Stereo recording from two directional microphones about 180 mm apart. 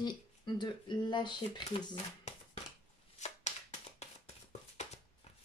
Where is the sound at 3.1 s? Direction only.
40° left (ahead or behind).